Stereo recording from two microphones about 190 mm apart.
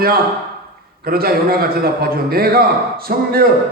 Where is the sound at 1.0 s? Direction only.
50° right (ahead or behind).